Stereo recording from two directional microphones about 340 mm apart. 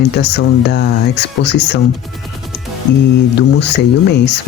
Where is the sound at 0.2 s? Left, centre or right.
Left.